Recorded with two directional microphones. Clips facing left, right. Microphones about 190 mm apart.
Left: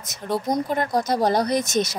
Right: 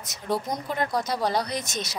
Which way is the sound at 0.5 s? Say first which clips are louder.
Left 5 dB; 45° left (ahead or behind).